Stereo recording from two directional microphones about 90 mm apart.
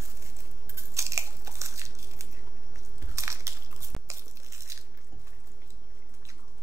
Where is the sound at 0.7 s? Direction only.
35° right (ahead or behind).